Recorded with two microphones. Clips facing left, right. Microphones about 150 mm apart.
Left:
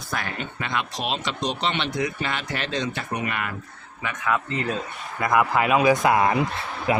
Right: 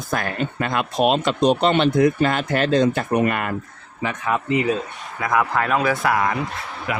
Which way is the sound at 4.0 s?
30° right (ahead or behind).